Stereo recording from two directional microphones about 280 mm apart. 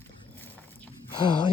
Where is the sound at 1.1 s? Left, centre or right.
Centre.